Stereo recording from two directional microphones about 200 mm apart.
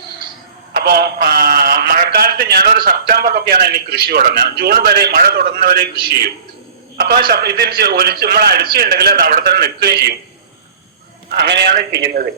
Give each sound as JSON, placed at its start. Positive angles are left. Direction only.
{"t": 0.7, "sound": "a sound", "side_deg": -50}
{"t": 3.1, "sound": "a man's voice", "side_deg": -50}
{"t": 6.9, "sound": "a man's voice", "side_deg": -50}
{"t": 11.3, "sound": "a man's voice", "side_deg": -55}